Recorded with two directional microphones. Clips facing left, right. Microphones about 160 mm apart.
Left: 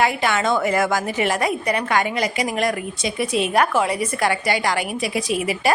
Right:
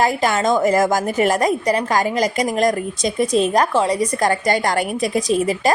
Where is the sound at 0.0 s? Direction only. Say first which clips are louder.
Right 2 dB; 40° right (ahead or behind).